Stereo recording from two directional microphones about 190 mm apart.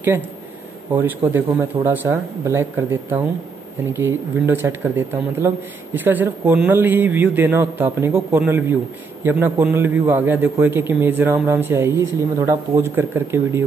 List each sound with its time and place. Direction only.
0.9 s a man's voice: 10° right (ahead or behind)